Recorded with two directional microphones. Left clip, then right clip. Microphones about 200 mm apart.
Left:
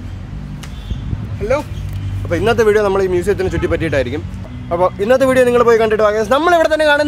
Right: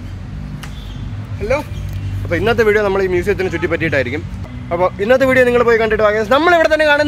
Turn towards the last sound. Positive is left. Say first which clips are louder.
# even
turn(degrees=5)  # may be behind; listen again after turning